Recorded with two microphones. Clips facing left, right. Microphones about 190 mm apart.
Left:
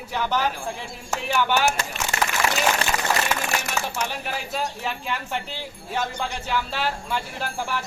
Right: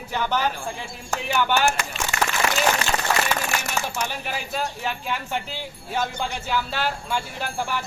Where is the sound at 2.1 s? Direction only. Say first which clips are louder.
Right 1 dB; 35° left (ahead or behind).